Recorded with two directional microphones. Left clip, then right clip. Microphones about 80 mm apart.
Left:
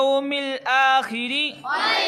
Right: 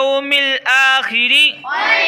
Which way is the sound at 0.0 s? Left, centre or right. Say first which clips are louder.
Right 7 dB; left.